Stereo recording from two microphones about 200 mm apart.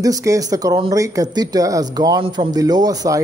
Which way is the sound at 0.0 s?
15° right (ahead or behind).